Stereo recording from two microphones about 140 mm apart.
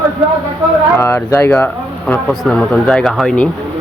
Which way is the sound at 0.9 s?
20° left (ahead or behind).